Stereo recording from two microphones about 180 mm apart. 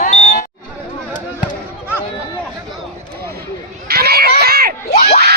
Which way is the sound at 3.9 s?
60° right (ahead or behind).